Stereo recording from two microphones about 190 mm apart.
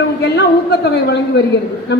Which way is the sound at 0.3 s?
60° left (ahead or behind).